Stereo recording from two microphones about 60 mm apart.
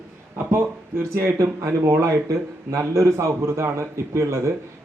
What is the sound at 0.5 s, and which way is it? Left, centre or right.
A man's voice, right.